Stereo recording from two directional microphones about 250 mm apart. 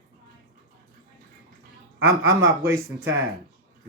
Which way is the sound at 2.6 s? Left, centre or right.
Centre.